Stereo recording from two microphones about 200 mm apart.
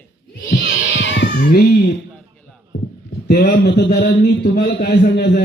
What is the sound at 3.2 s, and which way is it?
A man's voice, 50° left (ahead or behind).